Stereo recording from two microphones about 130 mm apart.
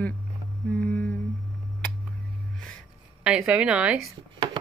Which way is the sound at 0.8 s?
10° left (ahead or behind).